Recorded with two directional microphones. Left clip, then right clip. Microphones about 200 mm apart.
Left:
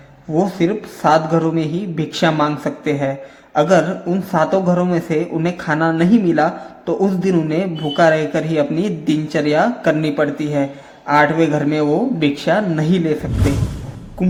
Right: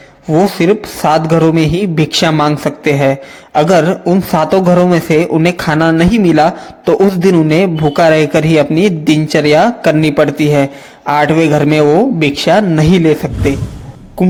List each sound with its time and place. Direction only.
0.3 s speech: 35° right (ahead or behind)
13.3 s speech: centre (ahead or behind)